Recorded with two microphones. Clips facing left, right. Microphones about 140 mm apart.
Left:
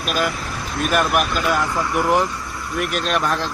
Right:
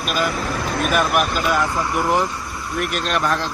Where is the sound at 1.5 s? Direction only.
20° right (ahead or behind).